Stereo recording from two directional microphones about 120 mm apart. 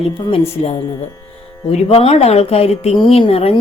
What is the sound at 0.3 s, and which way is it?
A woman's voice, 55° left (ahead or behind).